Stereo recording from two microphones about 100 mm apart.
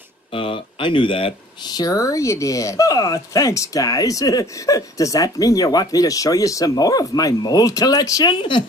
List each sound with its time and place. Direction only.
0.3 s speech: 60° left (ahead or behind)
1.7 s speech: 40° left (ahead or behind)
8.4 s speech: 55° left (ahead or behind)